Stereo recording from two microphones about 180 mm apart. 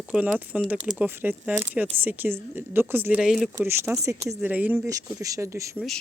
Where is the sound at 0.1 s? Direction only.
10° right (ahead or behind).